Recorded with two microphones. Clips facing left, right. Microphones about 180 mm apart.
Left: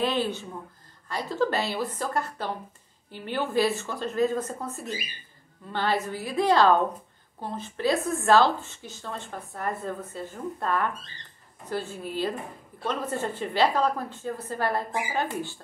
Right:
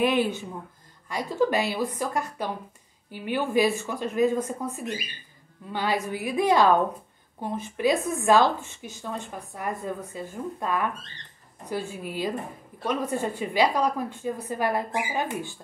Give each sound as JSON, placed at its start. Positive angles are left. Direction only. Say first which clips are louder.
{"t": 0.0, "sound": "a woman's voice", "louder": "right 3 dB", "side_deg": -15}